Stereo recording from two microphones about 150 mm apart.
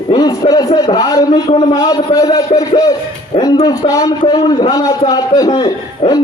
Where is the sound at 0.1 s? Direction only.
25° left (ahead or behind).